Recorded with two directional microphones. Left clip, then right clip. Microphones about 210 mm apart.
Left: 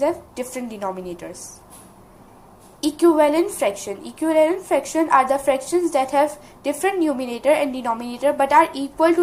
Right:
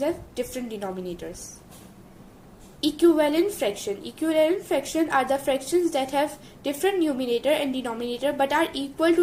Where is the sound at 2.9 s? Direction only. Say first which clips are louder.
Left 4 dB; centre (ahead or behind).